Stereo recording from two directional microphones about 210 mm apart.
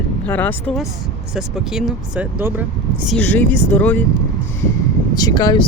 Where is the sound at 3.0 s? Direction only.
5° left (ahead or behind).